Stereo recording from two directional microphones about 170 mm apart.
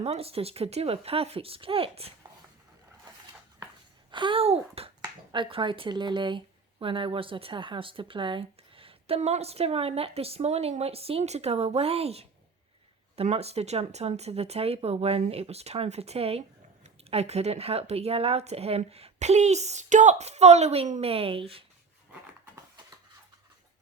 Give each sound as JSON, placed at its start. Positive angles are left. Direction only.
{"t": 0.0, "sound": "speech", "side_deg": -35}
{"t": 4.1, "sound": "speech", "side_deg": -30}